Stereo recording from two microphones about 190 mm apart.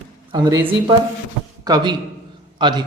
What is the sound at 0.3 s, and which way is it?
A man's voice, 20° right (ahead or behind).